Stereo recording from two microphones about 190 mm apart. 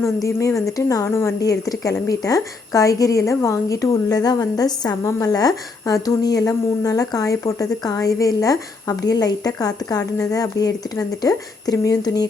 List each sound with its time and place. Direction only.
0.6 s speech: 15° left (ahead or behind)